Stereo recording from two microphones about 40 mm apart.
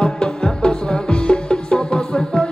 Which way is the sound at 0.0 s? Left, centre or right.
Left.